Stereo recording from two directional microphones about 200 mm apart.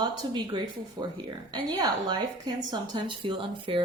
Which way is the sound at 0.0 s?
20° right (ahead or behind).